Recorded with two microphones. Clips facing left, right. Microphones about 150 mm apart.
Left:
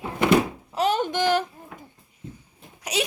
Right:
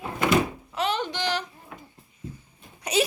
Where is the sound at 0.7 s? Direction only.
40° left (ahead or behind).